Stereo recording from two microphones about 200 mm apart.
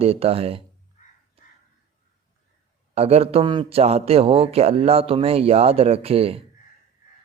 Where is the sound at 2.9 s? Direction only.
30° right (ahead or behind).